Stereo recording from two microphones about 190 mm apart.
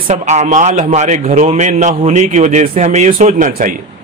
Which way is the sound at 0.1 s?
40° right (ahead or behind).